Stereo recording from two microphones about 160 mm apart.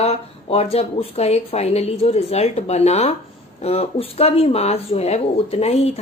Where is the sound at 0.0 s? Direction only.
40° left (ahead or behind).